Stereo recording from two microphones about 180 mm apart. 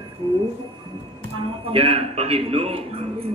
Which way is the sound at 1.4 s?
30° right (ahead or behind).